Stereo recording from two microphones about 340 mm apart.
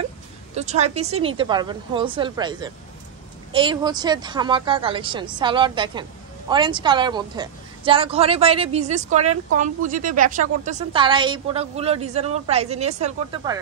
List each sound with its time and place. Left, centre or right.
0.6 s a woman's voice: centre